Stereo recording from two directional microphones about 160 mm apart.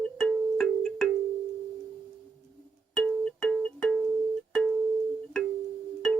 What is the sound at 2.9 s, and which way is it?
Music, 5° left (ahead or behind).